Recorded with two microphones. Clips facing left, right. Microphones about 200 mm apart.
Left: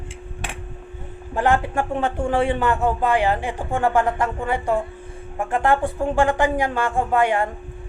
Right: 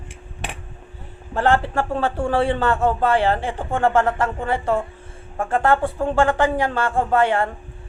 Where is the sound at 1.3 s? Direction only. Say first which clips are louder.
Right 1 dB; 15° left (ahead or behind).